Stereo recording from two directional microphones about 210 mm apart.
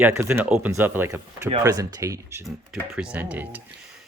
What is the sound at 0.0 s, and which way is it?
Speech, 10° right (ahead or behind).